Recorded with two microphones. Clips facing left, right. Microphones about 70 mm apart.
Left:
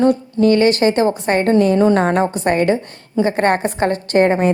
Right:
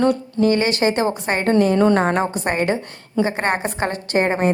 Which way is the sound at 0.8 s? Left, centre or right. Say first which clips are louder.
Left 4 dB; right.